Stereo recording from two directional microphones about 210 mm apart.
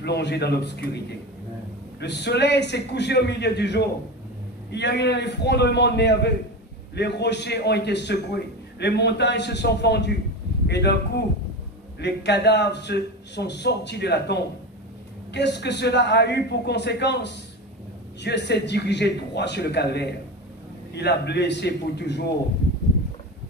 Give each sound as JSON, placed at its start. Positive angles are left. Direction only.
{"t": 0.0, "sound": "a man's voice", "side_deg": 55}